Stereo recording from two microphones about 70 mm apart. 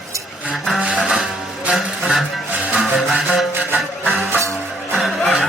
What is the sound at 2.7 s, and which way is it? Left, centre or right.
Music, centre.